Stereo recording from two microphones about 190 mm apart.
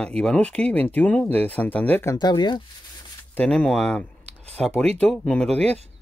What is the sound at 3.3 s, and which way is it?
Speech, 5° left (ahead or behind).